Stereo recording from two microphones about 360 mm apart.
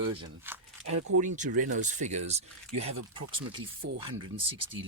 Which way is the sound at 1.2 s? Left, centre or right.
Right.